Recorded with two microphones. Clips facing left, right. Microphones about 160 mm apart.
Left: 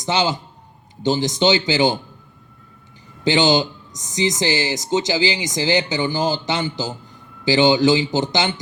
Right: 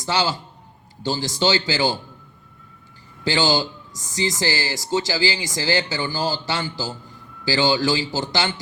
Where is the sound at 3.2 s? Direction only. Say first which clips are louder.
Left 4 dB; 20° left (ahead or behind).